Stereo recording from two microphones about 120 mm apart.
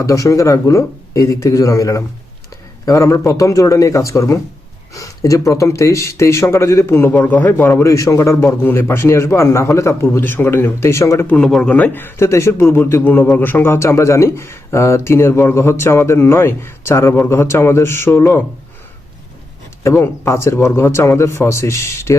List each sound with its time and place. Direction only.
0.0 s a man's voice: 25° left (ahead or behind)
11.3 s a man's voice: 5° left (ahead or behind)
19.8 s a man's voice: 20° left (ahead or behind)